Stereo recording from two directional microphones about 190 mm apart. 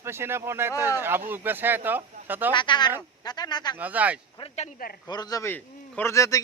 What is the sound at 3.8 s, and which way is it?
Speech, 10° right (ahead or behind).